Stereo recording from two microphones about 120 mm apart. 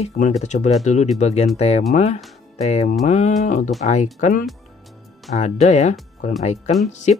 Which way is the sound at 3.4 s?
90° left.